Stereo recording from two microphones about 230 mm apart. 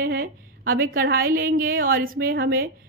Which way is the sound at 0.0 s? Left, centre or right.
Right.